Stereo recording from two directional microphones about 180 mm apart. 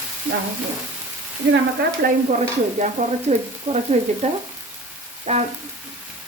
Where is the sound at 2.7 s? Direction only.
40° right (ahead or behind).